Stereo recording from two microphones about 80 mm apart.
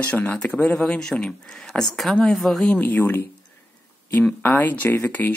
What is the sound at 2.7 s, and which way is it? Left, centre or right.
Speech, left.